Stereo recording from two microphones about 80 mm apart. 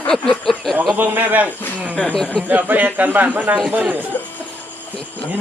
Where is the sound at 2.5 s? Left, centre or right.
Right.